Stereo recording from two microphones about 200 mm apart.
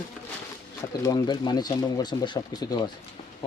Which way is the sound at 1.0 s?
20° left (ahead or behind).